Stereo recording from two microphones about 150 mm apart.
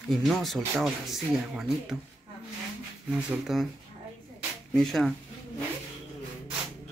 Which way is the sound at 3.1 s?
5° right (ahead or behind).